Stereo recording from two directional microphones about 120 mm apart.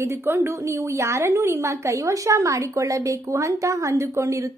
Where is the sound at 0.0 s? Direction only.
20° right (ahead or behind).